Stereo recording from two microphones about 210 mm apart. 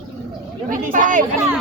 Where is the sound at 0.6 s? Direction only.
40° right (ahead or behind).